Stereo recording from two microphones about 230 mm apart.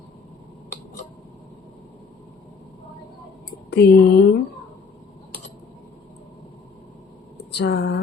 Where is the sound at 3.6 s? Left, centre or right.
Left.